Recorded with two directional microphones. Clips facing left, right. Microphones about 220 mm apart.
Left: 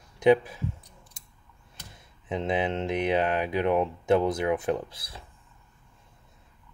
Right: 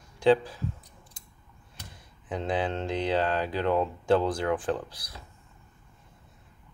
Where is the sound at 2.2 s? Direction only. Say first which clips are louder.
Left 2 dB; 25° left (ahead or behind).